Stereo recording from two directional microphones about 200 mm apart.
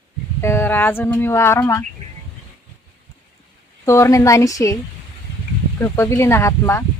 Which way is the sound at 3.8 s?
15° left (ahead or behind).